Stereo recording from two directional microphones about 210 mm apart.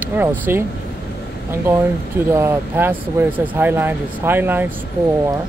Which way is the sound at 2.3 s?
10° right (ahead or behind).